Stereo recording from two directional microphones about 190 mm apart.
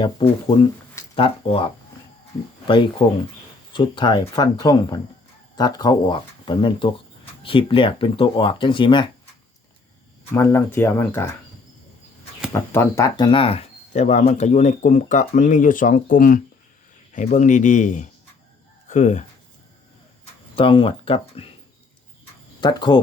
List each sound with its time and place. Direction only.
0.0 s speech: 25° left (ahead or behind)
10.3 s speech: 10° left (ahead or behind)
12.7 s speech: 15° left (ahead or behind); by 19.2 s 40° left (ahead or behind)
20.6 s speech: 30° left (ahead or behind)
22.6 s speech: 25° left (ahead or behind)